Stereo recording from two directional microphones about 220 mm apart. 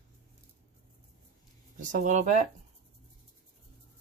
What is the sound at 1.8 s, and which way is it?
Speech, 35° right (ahead or behind).